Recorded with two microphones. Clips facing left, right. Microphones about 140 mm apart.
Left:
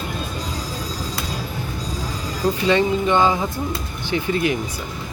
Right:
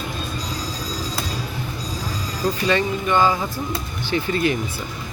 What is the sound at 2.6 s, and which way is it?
Speech, 20° left (ahead or behind).